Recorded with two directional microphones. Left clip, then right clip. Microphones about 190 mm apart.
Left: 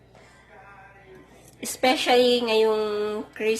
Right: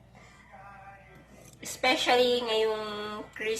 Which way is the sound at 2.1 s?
40° left (ahead or behind).